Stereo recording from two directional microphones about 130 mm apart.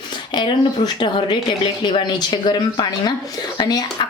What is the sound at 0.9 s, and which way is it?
Speech, 35° left (ahead or behind).